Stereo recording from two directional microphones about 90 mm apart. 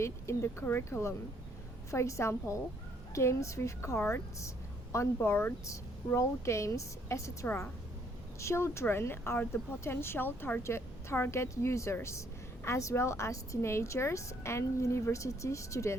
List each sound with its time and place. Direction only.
0.0 s a woman's voice: 30° left (ahead or behind)